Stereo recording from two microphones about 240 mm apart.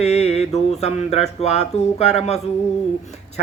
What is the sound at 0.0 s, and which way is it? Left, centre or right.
Speech, left.